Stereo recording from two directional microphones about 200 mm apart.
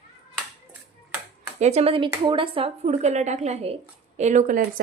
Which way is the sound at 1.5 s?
35° right (ahead or behind).